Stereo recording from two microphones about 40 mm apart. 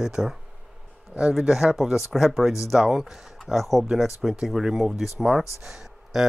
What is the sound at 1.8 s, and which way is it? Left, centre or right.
Speech, centre.